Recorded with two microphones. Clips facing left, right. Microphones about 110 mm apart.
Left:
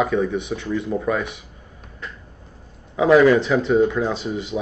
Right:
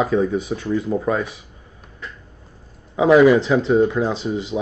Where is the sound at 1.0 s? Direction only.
25° right (ahead or behind).